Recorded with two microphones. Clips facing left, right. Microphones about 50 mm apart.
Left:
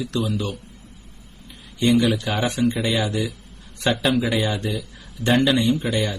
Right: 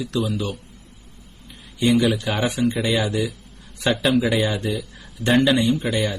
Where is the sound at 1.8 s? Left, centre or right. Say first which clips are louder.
Even; centre.